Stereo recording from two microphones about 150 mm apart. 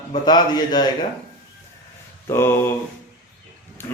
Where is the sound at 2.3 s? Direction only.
15° left (ahead or behind).